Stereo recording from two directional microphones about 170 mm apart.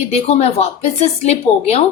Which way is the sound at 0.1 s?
40° left (ahead or behind).